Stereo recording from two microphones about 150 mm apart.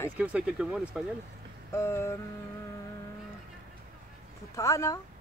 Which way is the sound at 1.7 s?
15° left (ahead or behind).